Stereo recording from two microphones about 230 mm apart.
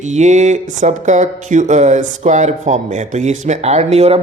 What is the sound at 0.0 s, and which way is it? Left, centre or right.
A man's voice, right.